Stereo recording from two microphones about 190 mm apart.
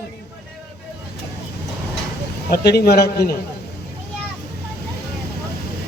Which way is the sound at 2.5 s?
60° left (ahead or behind).